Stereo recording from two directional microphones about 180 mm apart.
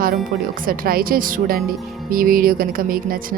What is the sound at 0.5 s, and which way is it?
A woman's voice, 50° right (ahead or behind).